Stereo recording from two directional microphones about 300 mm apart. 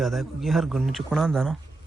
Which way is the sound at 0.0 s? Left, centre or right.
Centre.